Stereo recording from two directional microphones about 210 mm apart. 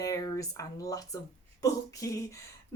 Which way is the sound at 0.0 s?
15° left (ahead or behind).